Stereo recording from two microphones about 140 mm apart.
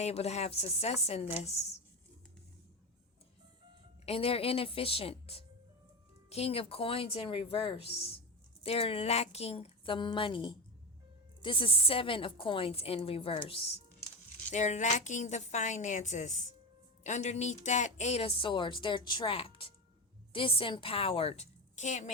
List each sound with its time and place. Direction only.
0.0 s speech: 50° left (ahead or behind)
4.0 s a woman's voice: 45° left (ahead or behind)
14.5 s a woman's voice: 55° left (ahead or behind)